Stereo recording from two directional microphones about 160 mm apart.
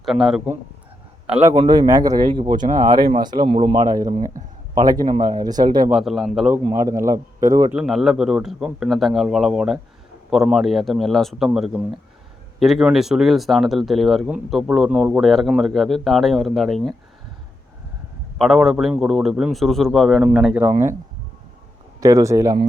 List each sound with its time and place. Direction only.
0.0 s speech: centre (ahead or behind)
1.3 s a man's voice: 15° right (ahead or behind)
1.5 s speech: 30° right (ahead or behind)
5.9 s speech: centre (ahead or behind)
6.7 s speech: 20° right (ahead or behind)
7.7 s speech: centre (ahead or behind)
18.3 s speech: centre (ahead or behind)
22.0 s speech: 20° right (ahead or behind)